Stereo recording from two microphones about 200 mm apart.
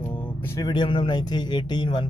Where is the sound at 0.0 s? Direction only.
10° left (ahead or behind).